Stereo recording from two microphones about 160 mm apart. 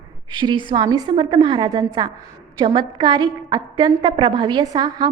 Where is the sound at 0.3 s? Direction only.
30° right (ahead or behind).